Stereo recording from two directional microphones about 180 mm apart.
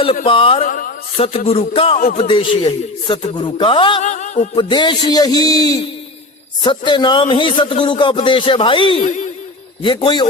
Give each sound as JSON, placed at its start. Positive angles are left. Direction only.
{"t": 0.3, "sound": "music", "side_deg": 30}
{"t": 0.7, "sound": "a man's voice", "side_deg": 50}
{"t": 1.1, "sound": "music", "side_deg": 30}
{"t": 2.1, "sound": "a man's voice", "side_deg": 25}
{"t": 4.0, "sound": "speech", "side_deg": 40}
{"t": 4.5, "sound": "a man's voice", "side_deg": 25}
{"t": 9.0, "sound": "speech", "side_deg": 40}
{"t": 9.8, "sound": "a man's voice", "side_deg": 25}